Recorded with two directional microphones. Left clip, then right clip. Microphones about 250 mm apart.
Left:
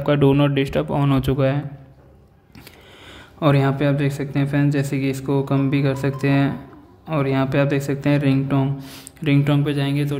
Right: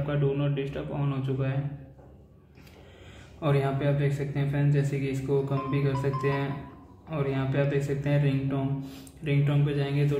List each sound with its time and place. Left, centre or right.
0.0 s speech: left
3.3 s speech: left